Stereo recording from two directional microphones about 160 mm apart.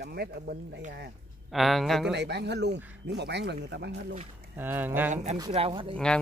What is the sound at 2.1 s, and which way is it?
Speech, 90° right.